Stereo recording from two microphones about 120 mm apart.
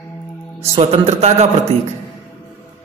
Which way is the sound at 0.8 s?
60° right (ahead or behind).